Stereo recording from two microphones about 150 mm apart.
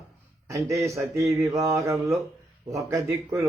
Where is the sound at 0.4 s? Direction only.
20° right (ahead or behind).